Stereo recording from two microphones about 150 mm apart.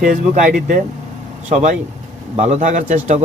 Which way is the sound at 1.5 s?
50° right (ahead or behind).